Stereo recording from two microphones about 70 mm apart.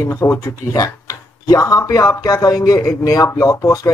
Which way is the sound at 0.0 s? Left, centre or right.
Left.